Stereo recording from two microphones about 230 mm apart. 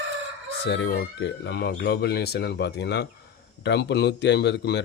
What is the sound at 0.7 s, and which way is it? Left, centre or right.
Speech, left.